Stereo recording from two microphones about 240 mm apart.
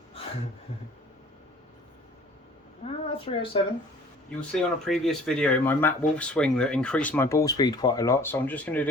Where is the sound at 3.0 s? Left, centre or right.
Left.